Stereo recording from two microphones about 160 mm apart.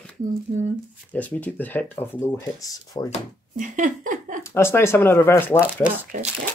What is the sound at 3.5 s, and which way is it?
Speech, 55° right (ahead or behind).